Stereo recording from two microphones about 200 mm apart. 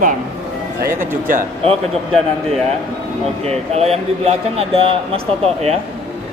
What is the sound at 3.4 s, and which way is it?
Speech, 30° right (ahead or behind).